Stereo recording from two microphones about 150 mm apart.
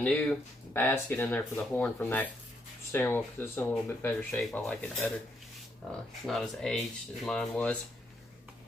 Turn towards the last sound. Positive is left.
turn(degrees=10)  # may be behind; listen again after turning